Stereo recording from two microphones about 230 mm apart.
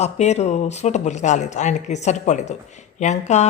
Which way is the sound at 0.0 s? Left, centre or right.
Left.